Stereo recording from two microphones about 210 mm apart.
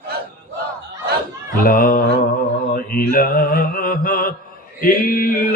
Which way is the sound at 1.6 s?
45° left (ahead or behind).